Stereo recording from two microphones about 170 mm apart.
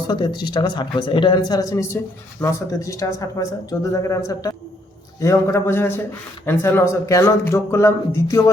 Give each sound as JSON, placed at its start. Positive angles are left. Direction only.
{"t": 0.1, "sound": "a man's voice", "side_deg": 25}